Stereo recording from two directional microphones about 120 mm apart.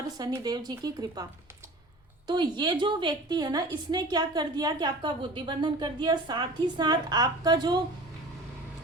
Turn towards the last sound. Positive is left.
turn(degrees=-35)  # may be behind; listen again after turning